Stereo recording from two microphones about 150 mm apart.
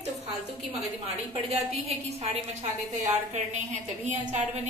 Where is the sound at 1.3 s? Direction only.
45° right (ahead or behind).